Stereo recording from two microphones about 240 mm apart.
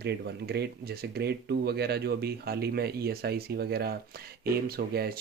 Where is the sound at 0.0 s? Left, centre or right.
Right.